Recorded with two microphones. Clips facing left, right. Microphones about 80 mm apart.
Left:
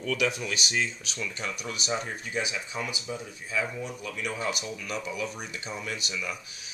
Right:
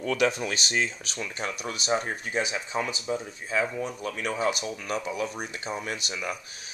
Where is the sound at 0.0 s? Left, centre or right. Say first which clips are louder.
Right 3 dB; right.